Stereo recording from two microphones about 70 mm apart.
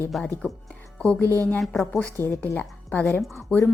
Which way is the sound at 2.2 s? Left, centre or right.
Left.